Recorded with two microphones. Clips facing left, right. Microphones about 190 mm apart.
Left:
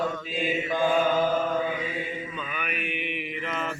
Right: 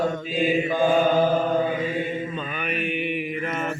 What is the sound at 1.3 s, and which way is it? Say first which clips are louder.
Mantra: right 4 dB; 35° right (ahead or behind).